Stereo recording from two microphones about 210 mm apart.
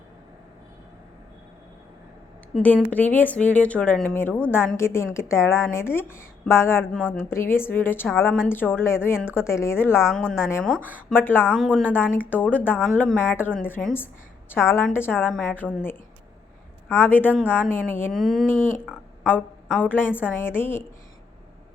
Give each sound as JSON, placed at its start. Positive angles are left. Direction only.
{"t": 2.5, "sound": "a woman's voice", "side_deg": 5}
{"t": 10.0, "sound": "a woman's voice", "side_deg": 0}